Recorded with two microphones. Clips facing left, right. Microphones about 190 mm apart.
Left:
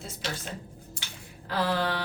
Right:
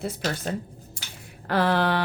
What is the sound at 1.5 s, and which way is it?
Speech, 65° right (ahead or behind).